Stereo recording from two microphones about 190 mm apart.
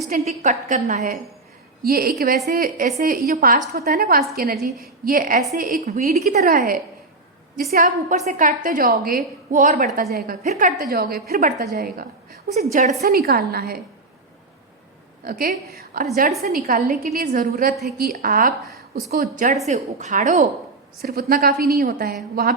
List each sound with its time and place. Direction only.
0.3 s a woman's voice: 40° right (ahead or behind)
6.1 s a woman's voice: 55° right (ahead or behind)
10.4 s a woman's voice: 40° right (ahead or behind)
12.7 s a woman's voice: 40° right (ahead or behind)
13.0 s a woman's voice: 55° right (ahead or behind)
15.2 s a woman's voice: 50° right (ahead or behind)
21.0 s a woman's voice: 50° right (ahead or behind)